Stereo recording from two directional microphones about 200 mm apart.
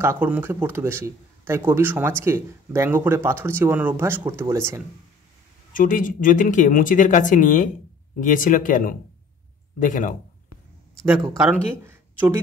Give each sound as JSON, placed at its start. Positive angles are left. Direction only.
{"t": 0.0, "sound": "speech", "side_deg": -10}
{"t": 5.7, "sound": "speech", "side_deg": 40}
{"t": 11.1, "sound": "speech", "side_deg": -15}